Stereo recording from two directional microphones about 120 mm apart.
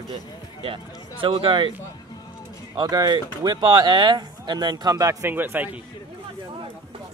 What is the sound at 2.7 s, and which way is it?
Speech, 35° right (ahead or behind).